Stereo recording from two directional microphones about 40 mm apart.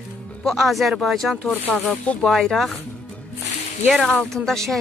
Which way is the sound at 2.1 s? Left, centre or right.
Left.